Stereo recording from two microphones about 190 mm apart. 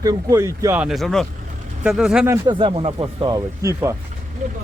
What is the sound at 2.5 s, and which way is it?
Speech, 25° right (ahead or behind).